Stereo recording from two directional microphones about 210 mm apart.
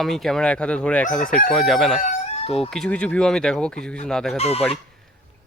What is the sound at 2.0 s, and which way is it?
Chicken, 30° left (ahead or behind).